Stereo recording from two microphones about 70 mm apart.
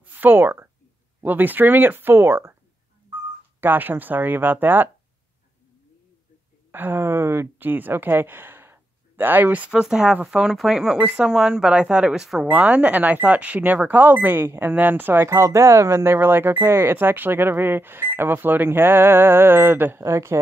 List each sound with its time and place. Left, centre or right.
0.0 s speech: right
3.6 s speech: right
6.7 s speech: right
9.7 s speech: centre
12.4 s speech: centre
15.2 s speech: right
20.0 s speech: right